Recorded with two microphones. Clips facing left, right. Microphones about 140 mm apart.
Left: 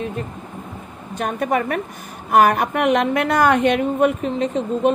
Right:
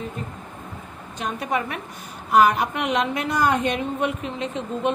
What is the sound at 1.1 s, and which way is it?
A woman's voice, 55° left (ahead or behind).